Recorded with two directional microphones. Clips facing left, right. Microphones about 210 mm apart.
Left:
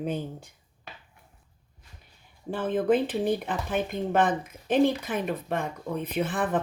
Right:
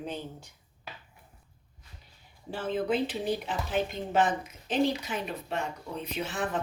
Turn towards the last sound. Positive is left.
turn(degrees=55)  # may be behind; listen again after turning